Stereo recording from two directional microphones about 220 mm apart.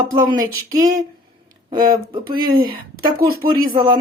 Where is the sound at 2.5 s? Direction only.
40° right (ahead or behind).